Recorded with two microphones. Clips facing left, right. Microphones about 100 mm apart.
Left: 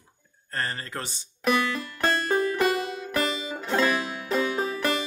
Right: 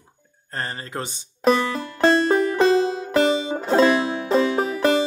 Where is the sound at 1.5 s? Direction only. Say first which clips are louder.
Right 5 dB; 30° right (ahead or behind).